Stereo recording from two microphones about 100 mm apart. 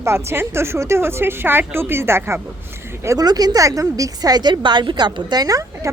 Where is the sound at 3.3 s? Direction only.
40° right (ahead or behind).